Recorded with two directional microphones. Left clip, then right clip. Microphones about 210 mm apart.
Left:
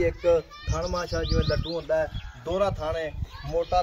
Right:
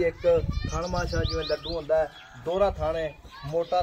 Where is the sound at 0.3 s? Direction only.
30° left (ahead or behind).